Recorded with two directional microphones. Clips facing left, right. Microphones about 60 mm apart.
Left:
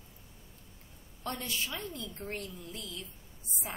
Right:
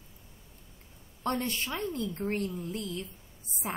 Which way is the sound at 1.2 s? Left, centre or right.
Right.